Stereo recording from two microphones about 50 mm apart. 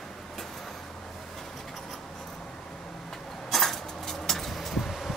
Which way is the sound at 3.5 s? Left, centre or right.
Centre.